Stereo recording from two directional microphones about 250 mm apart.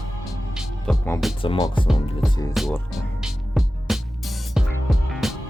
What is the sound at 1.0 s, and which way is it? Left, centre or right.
Music, centre.